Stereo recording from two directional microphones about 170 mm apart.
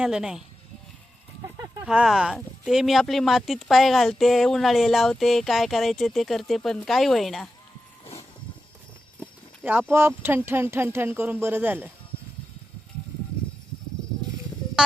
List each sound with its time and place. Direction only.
0.0 s speech: 5° right (ahead or behind)
1.8 s speech: 5° right (ahead or behind)
9.9 s speech: 15° right (ahead or behind)
14.8 s speech: 5° right (ahead or behind)